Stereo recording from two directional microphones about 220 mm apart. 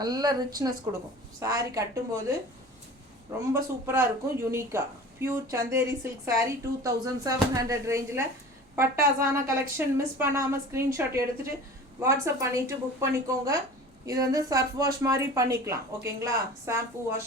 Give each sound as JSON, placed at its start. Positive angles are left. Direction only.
{"t": 0.0, "sound": "a woman's voice", "side_deg": -20}
{"t": 3.5, "sound": "a woman's voice", "side_deg": -10}